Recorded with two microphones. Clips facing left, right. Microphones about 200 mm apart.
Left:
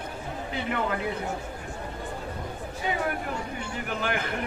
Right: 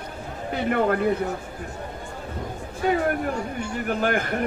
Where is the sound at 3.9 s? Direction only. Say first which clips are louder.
Right 6 dB; 45° right (ahead or behind).